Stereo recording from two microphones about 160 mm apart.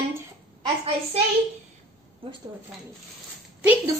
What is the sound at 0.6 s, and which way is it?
Speech, 35° right (ahead or behind).